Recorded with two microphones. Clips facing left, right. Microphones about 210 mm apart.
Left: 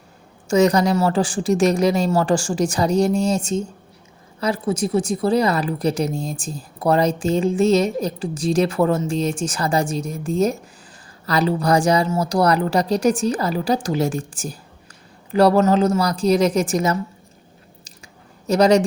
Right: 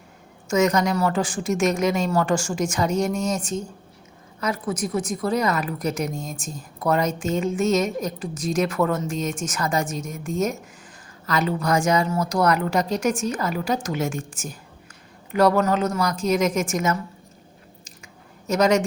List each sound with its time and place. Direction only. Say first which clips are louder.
0.4 s a woman's voice: left 4 dB; 35° left (ahead or behind)
18.4 s speech: left 4 dB; 35° left (ahead or behind)